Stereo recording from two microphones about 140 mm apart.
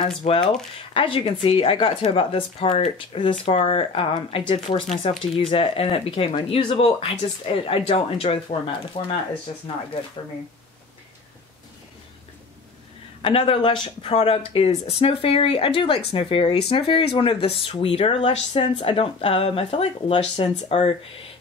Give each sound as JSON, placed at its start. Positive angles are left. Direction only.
{"t": 0.2, "sound": "speech", "side_deg": 40}
{"t": 13.2, "sound": "speech", "side_deg": 40}